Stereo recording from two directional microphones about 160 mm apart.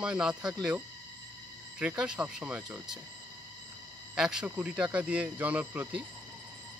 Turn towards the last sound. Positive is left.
turn(degrees=-10)  # may be behind; listen again after turning